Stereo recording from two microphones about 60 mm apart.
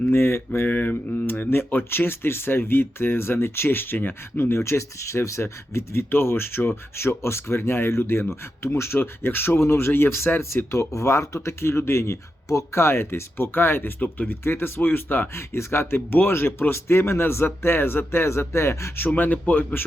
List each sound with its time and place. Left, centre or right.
0.1 s speech: left
0.7 s speech: left
14.0 s speech: left
14.4 s speech: left